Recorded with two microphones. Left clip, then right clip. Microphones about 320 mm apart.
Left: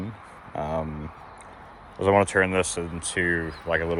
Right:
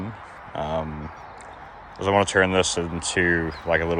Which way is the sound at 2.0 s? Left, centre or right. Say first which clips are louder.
Right 1 dB; centre.